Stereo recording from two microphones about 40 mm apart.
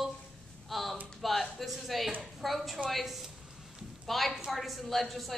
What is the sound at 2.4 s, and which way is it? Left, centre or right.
A woman's voice, centre.